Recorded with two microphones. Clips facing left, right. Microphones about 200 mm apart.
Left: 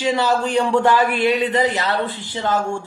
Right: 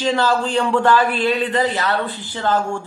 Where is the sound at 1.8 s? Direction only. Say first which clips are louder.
Even; 20° left (ahead or behind).